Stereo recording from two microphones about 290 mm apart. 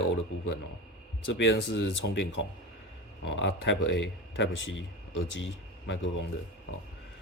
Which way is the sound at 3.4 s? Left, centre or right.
Left.